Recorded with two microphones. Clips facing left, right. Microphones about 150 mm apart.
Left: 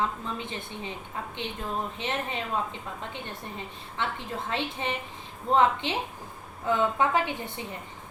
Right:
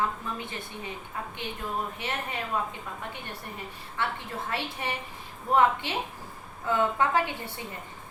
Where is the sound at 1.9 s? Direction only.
20° left (ahead or behind).